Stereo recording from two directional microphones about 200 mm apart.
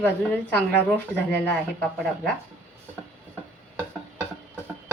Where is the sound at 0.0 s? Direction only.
5° left (ahead or behind).